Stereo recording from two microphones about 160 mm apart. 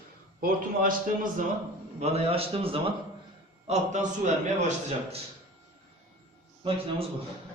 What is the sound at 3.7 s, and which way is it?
A man's voice, 50° right (ahead or behind).